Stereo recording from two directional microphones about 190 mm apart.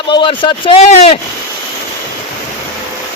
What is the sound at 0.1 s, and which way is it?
Speech, 25° left (ahead or behind).